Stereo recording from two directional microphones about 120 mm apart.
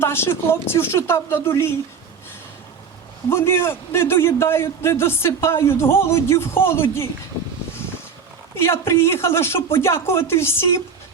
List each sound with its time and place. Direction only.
0.0 s a man's voice: 20° left (ahead or behind)
3.2 s a man's voice: 20° left (ahead or behind)
8.5 s a man's voice: 20° left (ahead or behind)